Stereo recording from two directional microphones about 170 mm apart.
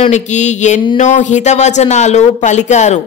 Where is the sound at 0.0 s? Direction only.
45° left (ahead or behind).